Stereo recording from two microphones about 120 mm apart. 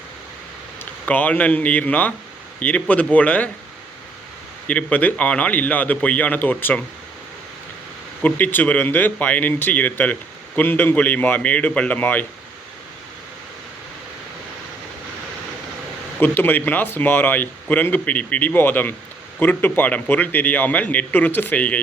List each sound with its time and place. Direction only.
1.0 s speech: 10° left (ahead or behind)
4.7 s speech: 10° left (ahead or behind)
8.2 s speech: 15° left (ahead or behind)
16.2 s speech: 15° left (ahead or behind)